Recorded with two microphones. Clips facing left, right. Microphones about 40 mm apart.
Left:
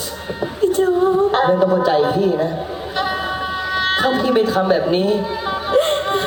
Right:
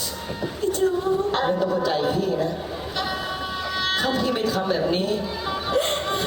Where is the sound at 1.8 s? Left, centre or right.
Left.